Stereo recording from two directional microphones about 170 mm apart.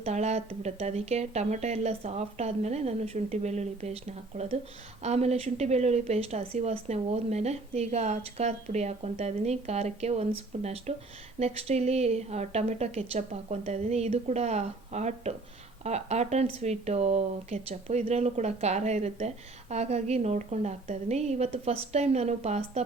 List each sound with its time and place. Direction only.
0.0 s speech: 40° right (ahead or behind)